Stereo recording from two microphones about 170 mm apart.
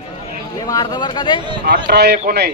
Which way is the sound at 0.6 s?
25° left (ahead or behind).